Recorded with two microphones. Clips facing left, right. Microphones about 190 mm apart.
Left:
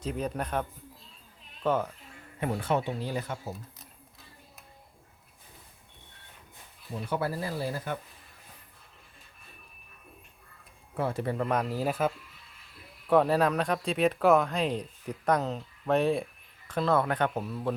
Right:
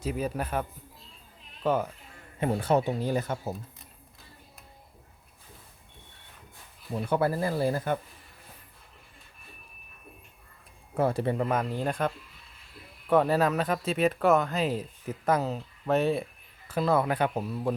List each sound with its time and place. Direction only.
0.0 s speech: 5° right (ahead or behind)
1.6 s speech: 10° right (ahead or behind)
2.4 s speech: 30° right (ahead or behind); by 3.5 s 45° right (ahead or behind)
7.1 s speech: 50° right (ahead or behind)
10.9 s speech: 40° right (ahead or behind)
11.3 s speech: 5° right (ahead or behind)